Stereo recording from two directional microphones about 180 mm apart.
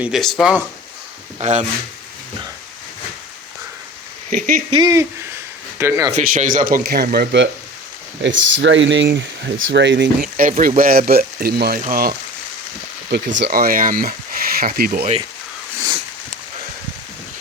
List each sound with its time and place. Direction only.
0.0 s speech: centre (ahead or behind)
1.4 s speech: 40° right (ahead or behind)
4.3 s speech: 50° right (ahead or behind)
4.7 s speech: 20° right (ahead or behind)
6.1 s speech: 45° right (ahead or behind); by 7.4 s 65° right (ahead or behind)
8.2 s speech: 90° right
10.3 s speech: 50° right (ahead or behind)
13.1 s speech: 70° right (ahead or behind)